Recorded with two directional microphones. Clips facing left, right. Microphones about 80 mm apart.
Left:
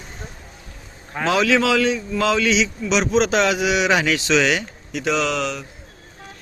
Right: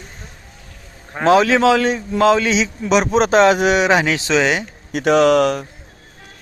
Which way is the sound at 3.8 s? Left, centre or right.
Right.